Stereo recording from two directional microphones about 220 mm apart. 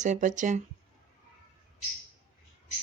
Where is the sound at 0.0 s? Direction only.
35° right (ahead or behind).